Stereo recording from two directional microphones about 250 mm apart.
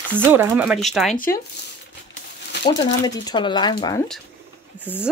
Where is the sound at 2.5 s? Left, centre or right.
Left.